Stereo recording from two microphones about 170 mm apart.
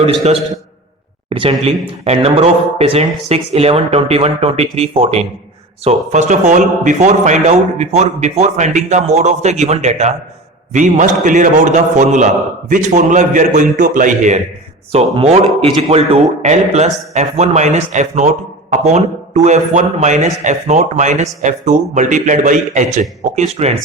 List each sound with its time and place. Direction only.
1.3 s a man's voice: 30° right (ahead or behind); by 14.3 s 50° right (ahead or behind)
14.9 s a man's voice: 35° right (ahead or behind)